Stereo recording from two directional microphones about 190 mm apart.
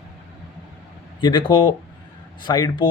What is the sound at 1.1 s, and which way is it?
Speech, 25° left (ahead or behind).